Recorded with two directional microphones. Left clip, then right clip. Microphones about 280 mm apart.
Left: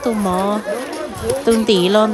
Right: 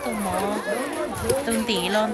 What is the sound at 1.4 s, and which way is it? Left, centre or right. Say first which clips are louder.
Music: left 10 dB; centre.